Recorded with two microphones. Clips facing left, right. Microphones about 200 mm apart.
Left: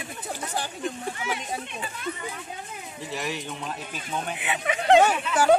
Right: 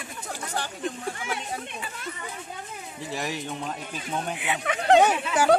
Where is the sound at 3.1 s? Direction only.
40° right (ahead or behind).